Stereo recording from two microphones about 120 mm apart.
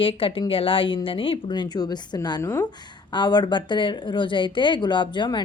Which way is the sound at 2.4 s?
20° left (ahead or behind).